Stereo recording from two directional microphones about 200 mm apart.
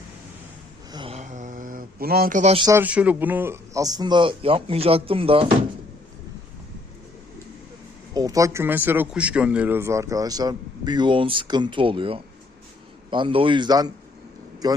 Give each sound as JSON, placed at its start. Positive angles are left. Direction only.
{"t": 0.9, "sound": "mantra", "side_deg": -30}
{"t": 2.6, "sound": "speech", "side_deg": -20}
{"t": 2.8, "sound": "speech", "side_deg": -5}
{"t": 8.1, "sound": "speech", "side_deg": -20}